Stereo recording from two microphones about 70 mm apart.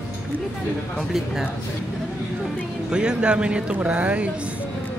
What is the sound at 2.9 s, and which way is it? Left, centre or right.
Speech, centre.